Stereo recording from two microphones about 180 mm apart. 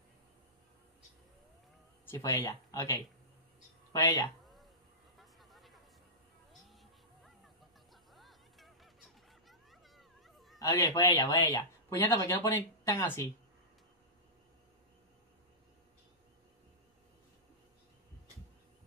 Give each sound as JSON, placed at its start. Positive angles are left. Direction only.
{"t": 2.0, "sound": "speech", "side_deg": 15}
{"t": 5.2, "sound": "a sound", "side_deg": 0}
{"t": 6.7, "sound": "music", "side_deg": 0}
{"t": 10.6, "sound": "speech", "side_deg": 20}